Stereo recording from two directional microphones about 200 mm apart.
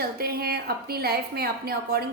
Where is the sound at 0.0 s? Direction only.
50° right (ahead or behind).